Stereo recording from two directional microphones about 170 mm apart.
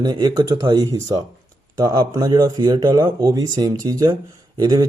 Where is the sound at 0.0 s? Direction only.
25° right (ahead or behind).